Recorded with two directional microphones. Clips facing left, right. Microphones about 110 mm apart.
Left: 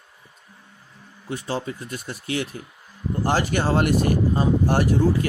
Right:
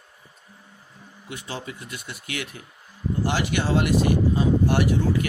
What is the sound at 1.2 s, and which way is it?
Speech, 35° left (ahead or behind).